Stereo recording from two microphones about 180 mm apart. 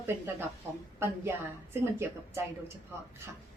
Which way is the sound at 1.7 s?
15° right (ahead or behind).